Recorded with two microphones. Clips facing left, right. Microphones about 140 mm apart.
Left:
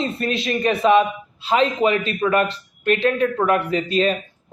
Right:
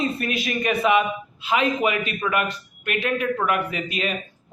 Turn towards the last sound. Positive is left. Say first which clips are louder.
# left 8 dB
turn(degrees=35)  # may be behind; listen again after turning